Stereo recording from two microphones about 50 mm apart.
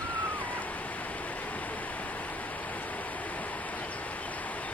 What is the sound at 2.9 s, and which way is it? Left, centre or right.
Waterfall, left.